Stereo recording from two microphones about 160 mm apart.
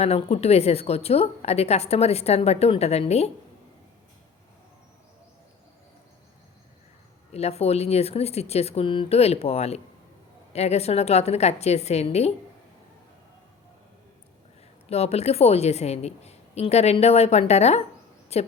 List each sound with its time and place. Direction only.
0.0 s a woman's voice: 40° left (ahead or behind)
7.3 s a woman's voice: 40° left (ahead or behind)
14.8 s a woman's voice: 40° left (ahead or behind)